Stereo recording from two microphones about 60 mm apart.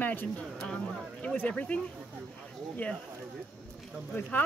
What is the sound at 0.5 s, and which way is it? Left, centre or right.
Speech, centre.